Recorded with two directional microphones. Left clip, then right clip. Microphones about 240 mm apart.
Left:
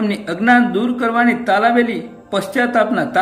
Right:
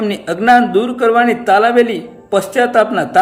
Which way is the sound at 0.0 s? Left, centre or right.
Centre.